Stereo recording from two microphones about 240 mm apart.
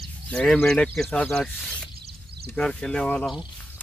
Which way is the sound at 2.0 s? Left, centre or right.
Right.